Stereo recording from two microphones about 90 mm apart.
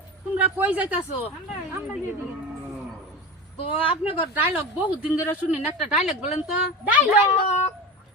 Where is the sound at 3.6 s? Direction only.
90° left.